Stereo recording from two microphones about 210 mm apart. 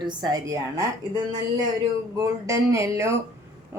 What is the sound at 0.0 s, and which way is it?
Speech, 20° right (ahead or behind).